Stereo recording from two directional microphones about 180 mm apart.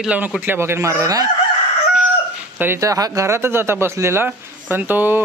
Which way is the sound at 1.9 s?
5° right (ahead or behind).